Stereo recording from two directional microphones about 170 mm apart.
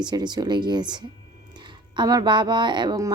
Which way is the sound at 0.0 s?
25° right (ahead or behind).